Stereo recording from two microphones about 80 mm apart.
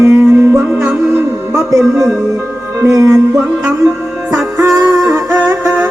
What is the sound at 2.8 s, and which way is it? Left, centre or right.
Music, right.